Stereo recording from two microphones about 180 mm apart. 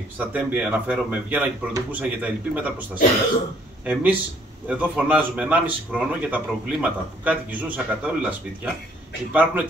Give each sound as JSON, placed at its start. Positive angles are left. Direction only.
{"t": 0.2, "sound": "a man's voice", "side_deg": -10}